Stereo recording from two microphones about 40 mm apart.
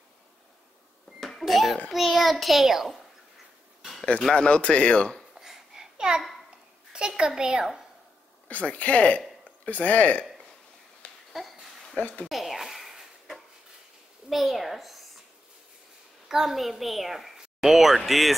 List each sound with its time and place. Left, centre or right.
1.4 s a child's voice: centre
4.3 s speech: left
5.4 s babbling: centre
6.9 s a child's voice: centre
8.5 s speech: left
11.0 s a sound: left
12.0 s speech: left
12.3 s a sound: centre
14.3 s a child's voice: centre
16.3 s a woman's voice: centre